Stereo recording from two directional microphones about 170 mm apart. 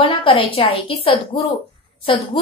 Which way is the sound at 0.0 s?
35° left (ahead or behind).